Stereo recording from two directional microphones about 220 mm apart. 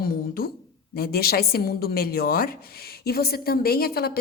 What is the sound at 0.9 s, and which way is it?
A woman's voice, 45° left (ahead or behind).